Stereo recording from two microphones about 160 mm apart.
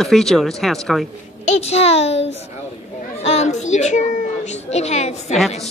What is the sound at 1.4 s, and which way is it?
A child's voice, 40° left (ahead or behind).